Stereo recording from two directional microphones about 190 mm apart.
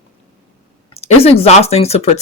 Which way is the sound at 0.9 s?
30° left (ahead or behind).